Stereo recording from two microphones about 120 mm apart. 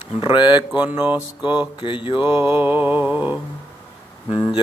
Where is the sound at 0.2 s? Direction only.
40° left (ahead or behind).